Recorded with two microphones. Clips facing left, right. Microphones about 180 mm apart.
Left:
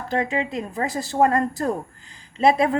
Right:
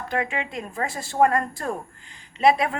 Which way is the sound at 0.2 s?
30° left (ahead or behind).